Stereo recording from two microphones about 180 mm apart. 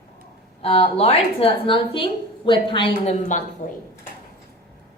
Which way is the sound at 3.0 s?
45° left (ahead or behind).